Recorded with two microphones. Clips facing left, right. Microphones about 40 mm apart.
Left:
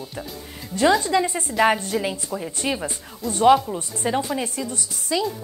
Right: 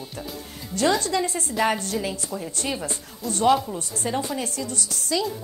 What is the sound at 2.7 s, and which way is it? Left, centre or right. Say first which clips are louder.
Speech: left 1 dB; centre.